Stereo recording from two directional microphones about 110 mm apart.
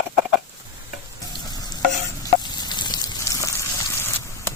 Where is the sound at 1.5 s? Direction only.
40° left (ahead or behind).